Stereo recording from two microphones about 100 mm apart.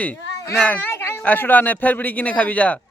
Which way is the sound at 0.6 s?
15° left (ahead or behind).